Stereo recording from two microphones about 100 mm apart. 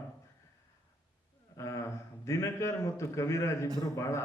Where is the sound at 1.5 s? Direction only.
30° left (ahead or behind).